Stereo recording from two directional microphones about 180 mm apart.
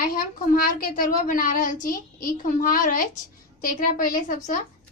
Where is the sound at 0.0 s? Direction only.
55° left (ahead or behind).